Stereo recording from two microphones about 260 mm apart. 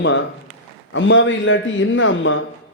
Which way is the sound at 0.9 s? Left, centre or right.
Left.